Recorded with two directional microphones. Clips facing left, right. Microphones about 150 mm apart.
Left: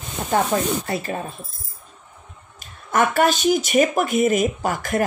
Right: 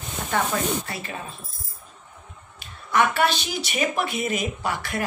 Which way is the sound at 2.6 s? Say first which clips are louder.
Left 2 dB; 45° left (ahead or behind).